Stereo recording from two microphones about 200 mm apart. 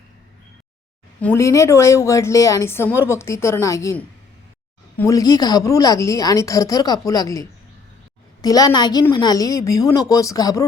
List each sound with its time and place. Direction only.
1.2 s a woman's voice: 10° left (ahead or behind)